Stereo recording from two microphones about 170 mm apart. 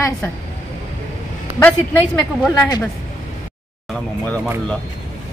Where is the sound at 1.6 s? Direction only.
10° left (ahead or behind).